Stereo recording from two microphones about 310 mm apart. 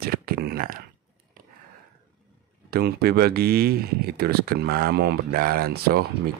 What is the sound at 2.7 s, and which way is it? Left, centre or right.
Speech, right.